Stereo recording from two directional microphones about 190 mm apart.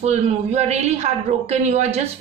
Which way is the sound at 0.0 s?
35° right (ahead or behind).